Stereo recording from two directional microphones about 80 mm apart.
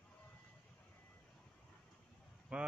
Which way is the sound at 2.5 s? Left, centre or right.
Centre.